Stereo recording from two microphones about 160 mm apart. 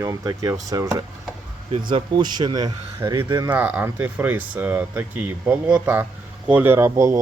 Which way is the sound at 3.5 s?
10° right (ahead or behind).